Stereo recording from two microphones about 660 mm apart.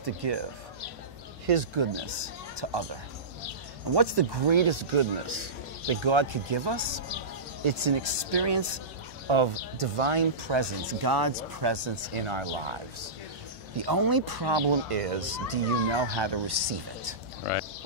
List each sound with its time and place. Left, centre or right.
0.0 s speech: right
1.5 s speech: right
13.7 s speech: right